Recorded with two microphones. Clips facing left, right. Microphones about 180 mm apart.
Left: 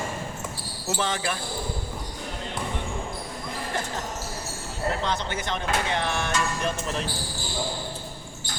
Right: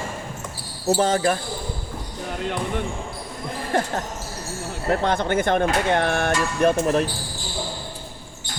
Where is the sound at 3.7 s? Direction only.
55° right (ahead or behind).